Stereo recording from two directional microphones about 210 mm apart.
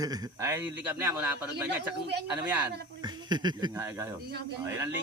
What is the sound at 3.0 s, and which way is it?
Speech, 20° right (ahead or behind).